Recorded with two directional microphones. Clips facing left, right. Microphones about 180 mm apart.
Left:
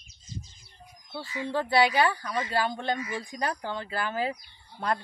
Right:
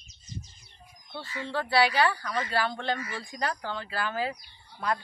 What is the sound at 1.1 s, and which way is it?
Speech, 15° left (ahead or behind).